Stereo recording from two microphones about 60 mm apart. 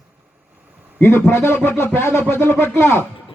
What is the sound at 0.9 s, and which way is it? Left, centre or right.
A man's voice, left.